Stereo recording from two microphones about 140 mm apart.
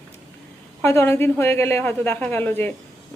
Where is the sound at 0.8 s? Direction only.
15° left (ahead or behind).